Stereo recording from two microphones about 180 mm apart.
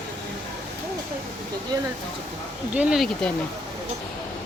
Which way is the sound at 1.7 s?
20° right (ahead or behind).